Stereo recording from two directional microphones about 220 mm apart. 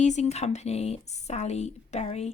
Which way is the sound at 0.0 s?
30° left (ahead or behind).